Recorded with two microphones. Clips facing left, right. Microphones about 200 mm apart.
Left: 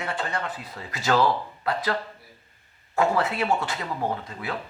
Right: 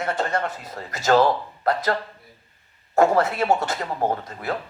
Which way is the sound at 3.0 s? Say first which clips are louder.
Right 5 dB; 40° right (ahead or behind).